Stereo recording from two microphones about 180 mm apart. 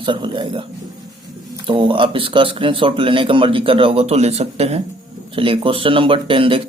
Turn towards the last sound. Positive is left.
turn(degrees=-30)  # may be behind; listen again after turning